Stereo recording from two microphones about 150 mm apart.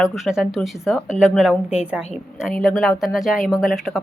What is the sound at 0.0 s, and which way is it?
Speech, centre (ahead or behind).